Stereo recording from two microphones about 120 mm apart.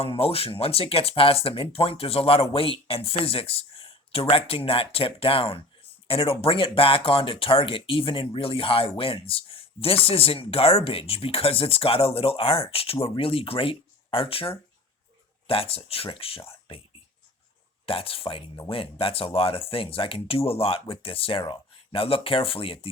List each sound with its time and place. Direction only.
0.0 s speech: 55° left (ahead or behind)
17.8 s speech: 50° left (ahead or behind)